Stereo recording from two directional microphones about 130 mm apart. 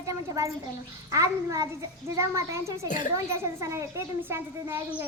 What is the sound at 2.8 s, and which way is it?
Speech, 90° left.